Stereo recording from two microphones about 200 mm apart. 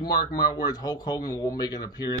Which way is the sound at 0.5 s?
20° left (ahead or behind).